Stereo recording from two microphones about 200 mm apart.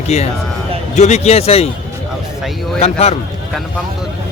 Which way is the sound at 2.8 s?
30° left (ahead or behind).